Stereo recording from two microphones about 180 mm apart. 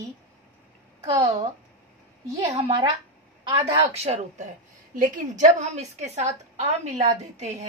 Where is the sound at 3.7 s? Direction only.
35° right (ahead or behind).